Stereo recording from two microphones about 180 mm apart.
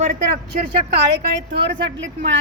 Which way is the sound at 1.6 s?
80° right.